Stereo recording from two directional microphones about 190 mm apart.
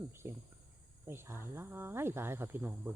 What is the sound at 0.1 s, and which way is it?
Cricket, 15° right (ahead or behind).